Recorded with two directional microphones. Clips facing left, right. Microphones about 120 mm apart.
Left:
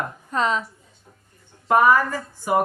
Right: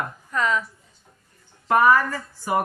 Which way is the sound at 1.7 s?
20° left (ahead or behind).